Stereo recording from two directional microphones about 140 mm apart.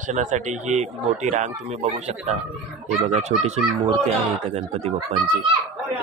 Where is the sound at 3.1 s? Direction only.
50° right (ahead or behind).